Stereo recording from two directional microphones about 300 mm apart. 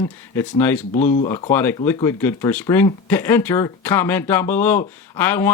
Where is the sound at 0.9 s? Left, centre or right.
Left.